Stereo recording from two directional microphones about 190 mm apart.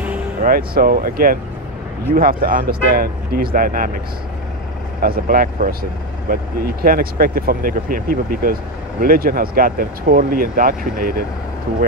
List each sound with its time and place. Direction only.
0.4 s speech: 50° right (ahead or behind)
5.0 s speech: 50° right (ahead or behind)